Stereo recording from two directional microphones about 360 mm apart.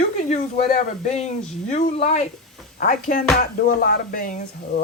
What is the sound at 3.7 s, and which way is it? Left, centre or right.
Speech, left.